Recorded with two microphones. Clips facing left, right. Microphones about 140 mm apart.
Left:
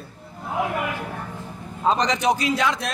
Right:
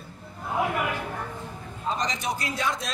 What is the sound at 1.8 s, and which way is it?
A man's voice, 75° left (ahead or behind).